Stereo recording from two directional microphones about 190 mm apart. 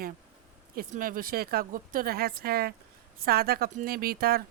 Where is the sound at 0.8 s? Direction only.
50° right (ahead or behind).